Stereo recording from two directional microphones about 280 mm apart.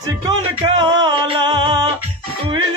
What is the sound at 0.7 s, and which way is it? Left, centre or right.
Music, centre.